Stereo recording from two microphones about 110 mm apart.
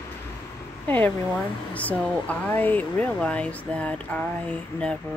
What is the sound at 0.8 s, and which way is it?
Speech, 15° left (ahead or behind).